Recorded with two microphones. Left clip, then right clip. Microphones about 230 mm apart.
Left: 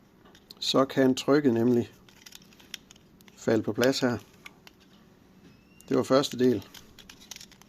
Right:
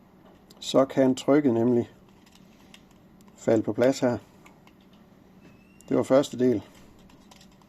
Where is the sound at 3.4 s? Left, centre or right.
Left.